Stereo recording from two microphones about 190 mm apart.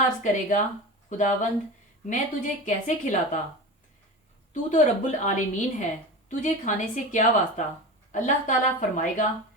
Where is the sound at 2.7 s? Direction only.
40° left (ahead or behind).